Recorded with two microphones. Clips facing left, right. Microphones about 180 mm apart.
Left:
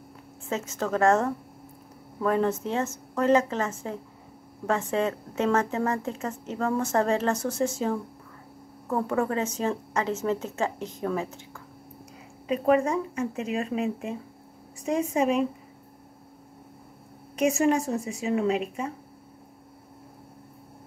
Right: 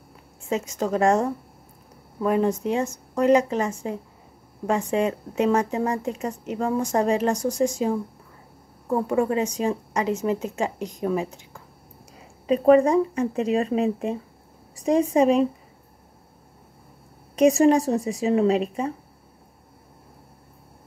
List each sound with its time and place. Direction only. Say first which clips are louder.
0.5 s speech: right 4 dB; 15° right (ahead or behind)
12.4 s a woman's voice: right 6 dB; 30° right (ahead or behind)
17.4 s a woman's voice: right 6 dB; 35° right (ahead or behind)